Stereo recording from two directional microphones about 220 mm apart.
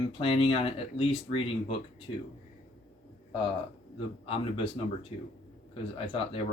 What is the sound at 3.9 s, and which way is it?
Speech, 25° left (ahead or behind).